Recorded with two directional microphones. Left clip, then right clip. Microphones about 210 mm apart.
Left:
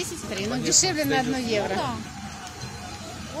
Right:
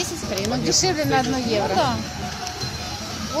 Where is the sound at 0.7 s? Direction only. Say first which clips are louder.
Right 2 dB; 40° left (ahead or behind).